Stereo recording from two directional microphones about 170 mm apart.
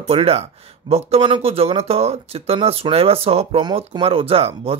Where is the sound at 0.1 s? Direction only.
35° right (ahead or behind).